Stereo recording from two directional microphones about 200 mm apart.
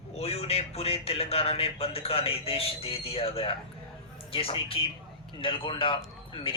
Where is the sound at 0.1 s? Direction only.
30° left (ahead or behind).